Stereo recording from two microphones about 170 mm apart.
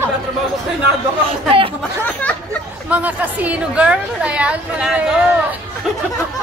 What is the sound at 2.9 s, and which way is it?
A woman's voice, 10° right (ahead or behind).